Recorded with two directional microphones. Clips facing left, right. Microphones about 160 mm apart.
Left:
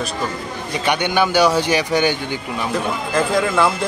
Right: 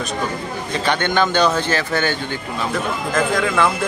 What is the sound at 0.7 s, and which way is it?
Speech, 10° left (ahead or behind).